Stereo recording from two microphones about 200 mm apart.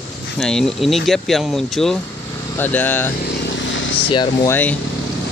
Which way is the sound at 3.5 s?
70° left (ahead or behind).